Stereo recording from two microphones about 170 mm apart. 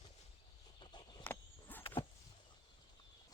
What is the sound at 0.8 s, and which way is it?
Chicken, 25° left (ahead or behind).